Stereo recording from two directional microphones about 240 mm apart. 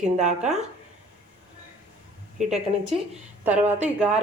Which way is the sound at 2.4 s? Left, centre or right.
Right.